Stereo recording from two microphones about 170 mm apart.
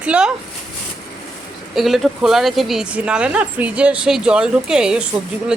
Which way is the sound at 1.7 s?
Centre (ahead or behind).